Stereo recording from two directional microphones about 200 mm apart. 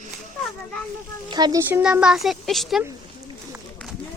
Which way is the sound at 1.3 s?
20° right (ahead or behind).